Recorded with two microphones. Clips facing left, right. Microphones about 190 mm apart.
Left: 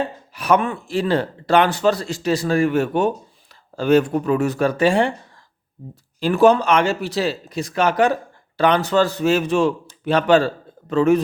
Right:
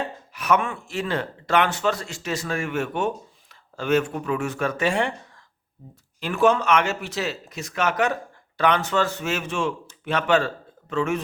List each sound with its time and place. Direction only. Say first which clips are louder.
0.3 s speech: left 4 dB; 35° left (ahead or behind)
6.1 s speech: left 6 dB; 35° left (ahead or behind)